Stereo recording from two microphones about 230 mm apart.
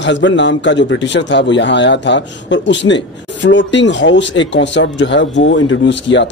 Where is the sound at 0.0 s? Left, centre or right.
Left.